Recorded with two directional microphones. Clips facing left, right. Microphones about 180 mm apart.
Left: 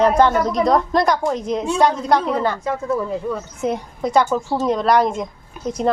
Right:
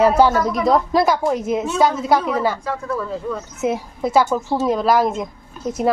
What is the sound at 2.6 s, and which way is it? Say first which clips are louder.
Speech: left 3 dB; 20° left (ahead or behind).